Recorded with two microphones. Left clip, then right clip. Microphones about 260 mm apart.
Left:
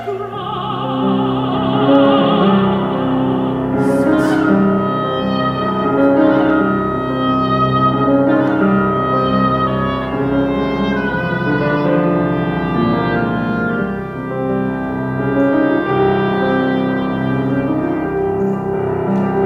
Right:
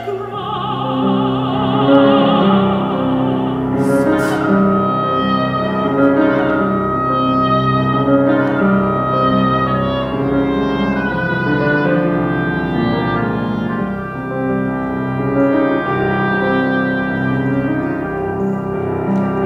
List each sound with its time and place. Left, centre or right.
1.8 s music: right
3.8 s music: right
6.0 s music: right
11.7 s music: right
15.4 s music: right